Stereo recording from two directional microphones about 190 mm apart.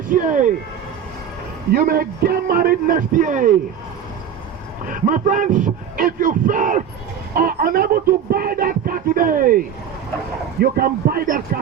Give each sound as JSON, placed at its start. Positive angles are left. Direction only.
{"t": 0.1, "sound": "speech", "side_deg": -45}
{"t": 1.7, "sound": "speech", "side_deg": -50}
{"t": 4.9, "sound": "speech", "side_deg": -45}